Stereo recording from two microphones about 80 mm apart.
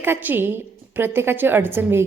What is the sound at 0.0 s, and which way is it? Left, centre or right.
A woman's voice, right.